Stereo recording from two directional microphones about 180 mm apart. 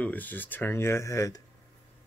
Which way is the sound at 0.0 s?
10° left (ahead or behind).